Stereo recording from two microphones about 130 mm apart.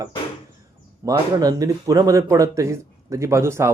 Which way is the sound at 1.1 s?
25° right (ahead or behind).